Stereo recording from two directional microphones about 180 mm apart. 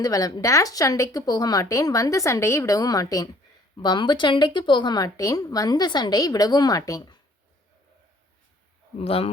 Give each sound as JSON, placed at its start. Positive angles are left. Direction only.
{"t": 0.0, "sound": "a woman's voice", "side_deg": 20}
{"t": 9.0, "sound": "a man's voice", "side_deg": 35}